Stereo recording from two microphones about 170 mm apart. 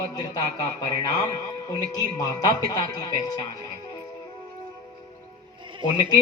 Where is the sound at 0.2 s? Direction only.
25° left (ahead or behind).